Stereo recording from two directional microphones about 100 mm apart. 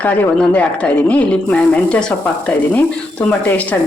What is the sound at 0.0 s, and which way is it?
Speech, 15° left (ahead or behind).